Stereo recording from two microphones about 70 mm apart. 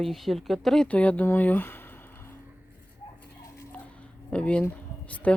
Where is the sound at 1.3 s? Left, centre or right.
Left.